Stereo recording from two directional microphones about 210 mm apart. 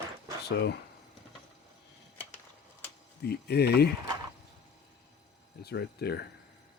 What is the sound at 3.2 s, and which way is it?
Speech, 50° left (ahead or behind).